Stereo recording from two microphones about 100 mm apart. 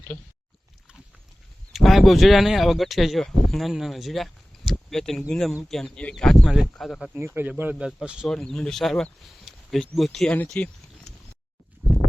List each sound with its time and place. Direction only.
0.1 s speech: 80° left
1.7 s speech: centre (ahead or behind)
7.3 s speech: 20° right (ahead or behind)
7.9 s speech: 5° right (ahead or behind)
8.3 s speech: 5° left (ahead or behind)
10.5 s a sound: 5° left (ahead or behind)